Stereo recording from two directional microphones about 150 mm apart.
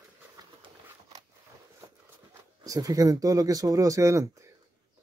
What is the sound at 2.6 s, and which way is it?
Speech, 25° right (ahead or behind).